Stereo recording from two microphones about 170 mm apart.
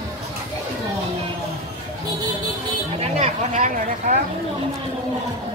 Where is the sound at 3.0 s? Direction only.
40° right (ahead or behind).